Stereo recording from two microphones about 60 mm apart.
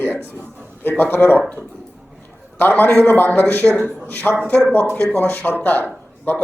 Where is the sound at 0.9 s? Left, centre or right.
Left.